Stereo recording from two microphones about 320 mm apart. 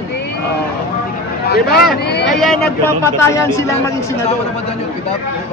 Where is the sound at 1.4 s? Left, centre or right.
Left.